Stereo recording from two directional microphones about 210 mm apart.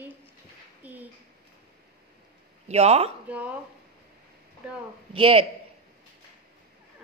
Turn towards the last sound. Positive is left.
turn(degrees=-25)  # may be behind; listen again after turning